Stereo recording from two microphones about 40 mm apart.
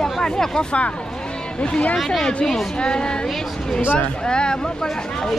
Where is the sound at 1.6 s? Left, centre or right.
Left.